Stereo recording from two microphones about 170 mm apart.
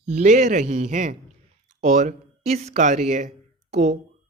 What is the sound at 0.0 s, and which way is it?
A woman's voice, 45° right (ahead or behind).